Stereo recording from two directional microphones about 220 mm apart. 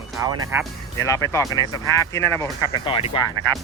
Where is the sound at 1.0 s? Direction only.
15° left (ahead or behind).